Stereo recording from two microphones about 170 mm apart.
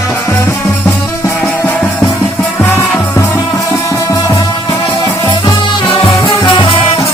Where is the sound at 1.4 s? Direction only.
5° left (ahead or behind); by 7.0 s 30° left (ahead or behind).